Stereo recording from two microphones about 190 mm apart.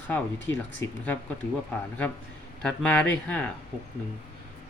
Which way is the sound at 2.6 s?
5° left (ahead or behind).